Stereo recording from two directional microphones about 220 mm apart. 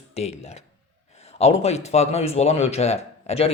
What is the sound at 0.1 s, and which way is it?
Speech, 30° left (ahead or behind).